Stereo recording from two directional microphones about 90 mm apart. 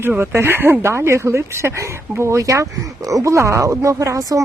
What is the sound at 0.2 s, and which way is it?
Speech, 25° right (ahead or behind).